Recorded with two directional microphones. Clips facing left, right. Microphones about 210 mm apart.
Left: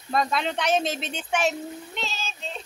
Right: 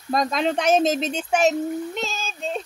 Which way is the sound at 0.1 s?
40° right (ahead or behind).